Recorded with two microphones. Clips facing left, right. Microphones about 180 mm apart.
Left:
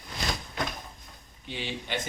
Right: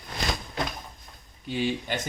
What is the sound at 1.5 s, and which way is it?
Speech, 45° right (ahead or behind).